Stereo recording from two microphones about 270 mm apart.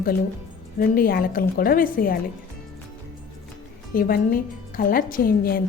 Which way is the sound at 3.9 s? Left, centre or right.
Left.